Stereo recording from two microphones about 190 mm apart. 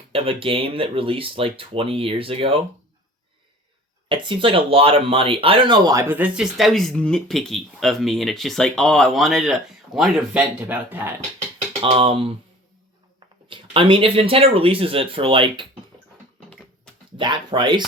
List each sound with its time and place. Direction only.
0.1 s speech: 30° right (ahead or behind)
4.1 s speech: 25° right (ahead or behind); by 11.1 s 10° right (ahead or behind)
11.8 s speech: 30° right (ahead or behind)
17.2 s speech: 25° right (ahead or behind)